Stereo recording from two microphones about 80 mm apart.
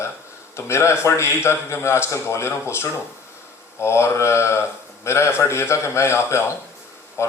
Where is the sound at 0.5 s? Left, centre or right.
Left.